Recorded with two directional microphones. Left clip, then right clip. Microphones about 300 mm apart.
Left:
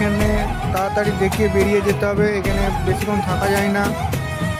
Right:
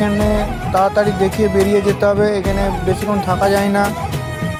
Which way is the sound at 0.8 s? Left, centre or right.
Centre.